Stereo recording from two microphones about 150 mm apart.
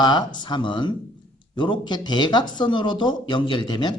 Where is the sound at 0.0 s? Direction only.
30° left (ahead or behind).